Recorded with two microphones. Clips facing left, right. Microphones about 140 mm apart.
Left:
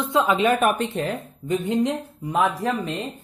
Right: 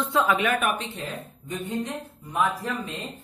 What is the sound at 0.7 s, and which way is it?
Speech, 75° left (ahead or behind).